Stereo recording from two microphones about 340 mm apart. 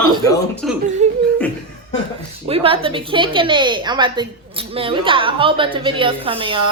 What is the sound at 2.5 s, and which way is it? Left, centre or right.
A woman's voice, centre.